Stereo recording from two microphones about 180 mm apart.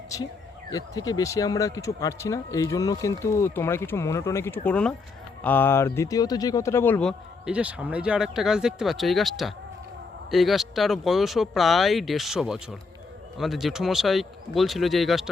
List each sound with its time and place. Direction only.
0.1 s speech: 20° left (ahead or behind); by 15.3 s centre (ahead or behind)